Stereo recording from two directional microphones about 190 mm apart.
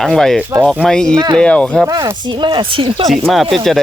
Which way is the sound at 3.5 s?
Centre (ahead or behind).